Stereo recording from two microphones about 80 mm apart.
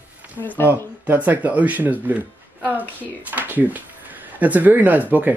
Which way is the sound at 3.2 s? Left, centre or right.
Right.